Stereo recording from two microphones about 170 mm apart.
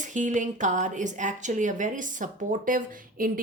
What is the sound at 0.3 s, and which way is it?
A woman's voice, 45° right (ahead or behind).